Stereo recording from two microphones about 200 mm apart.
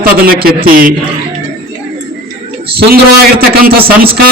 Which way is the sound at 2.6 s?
50° right (ahead or behind).